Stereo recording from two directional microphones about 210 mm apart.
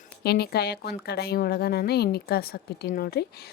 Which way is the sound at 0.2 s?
50° left (ahead or behind).